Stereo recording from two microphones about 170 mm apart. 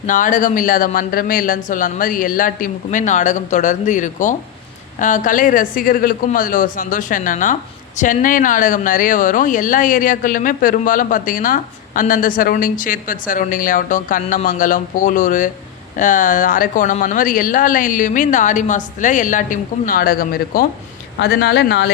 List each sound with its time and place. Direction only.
0.0 s a woman's voice: 50° left (ahead or behind)
21.2 s speech: 75° left (ahead or behind)